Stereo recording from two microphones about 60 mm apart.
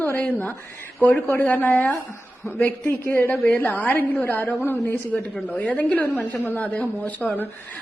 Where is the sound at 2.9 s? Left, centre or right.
Left.